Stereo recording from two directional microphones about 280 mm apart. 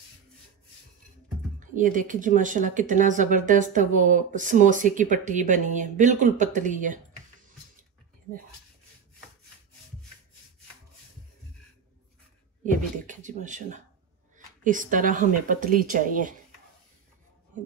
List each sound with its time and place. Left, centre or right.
1.6 s speech: right
12.6 s speech: right